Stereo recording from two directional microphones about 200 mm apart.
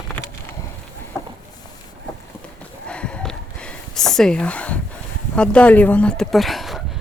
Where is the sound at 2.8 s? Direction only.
5° left (ahead or behind).